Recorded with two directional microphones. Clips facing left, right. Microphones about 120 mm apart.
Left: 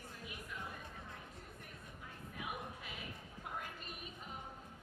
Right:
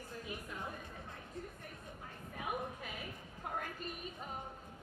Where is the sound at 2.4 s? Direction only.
40° right (ahead or behind).